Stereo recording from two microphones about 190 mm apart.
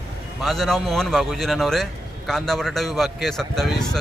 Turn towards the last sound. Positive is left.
turn(degrees=0)  # may be behind; listen again after turning